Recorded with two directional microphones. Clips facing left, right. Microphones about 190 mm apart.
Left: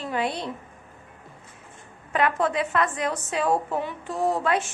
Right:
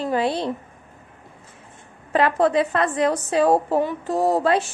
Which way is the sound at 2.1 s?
35° right (ahead or behind).